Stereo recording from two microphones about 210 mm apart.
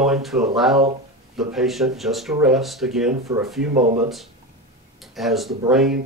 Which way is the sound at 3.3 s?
15° right (ahead or behind).